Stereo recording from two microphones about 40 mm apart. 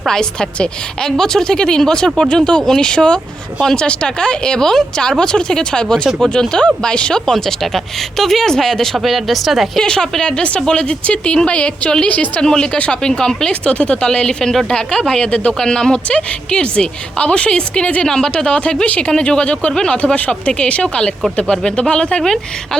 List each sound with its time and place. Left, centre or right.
0.1 s speech: centre
3.8 s speech: left
9.0 s speech: centre
9.7 s speech: centre
12.0 s a woman's voice: left
12.4 s speech: centre
15.5 s speech: centre
16.0 s a woman's voice: left
20.1 s a woman's voice: left
22.2 s speech: centre